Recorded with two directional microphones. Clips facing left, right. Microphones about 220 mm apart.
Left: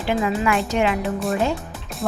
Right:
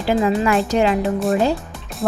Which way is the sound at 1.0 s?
Centre (ahead or behind).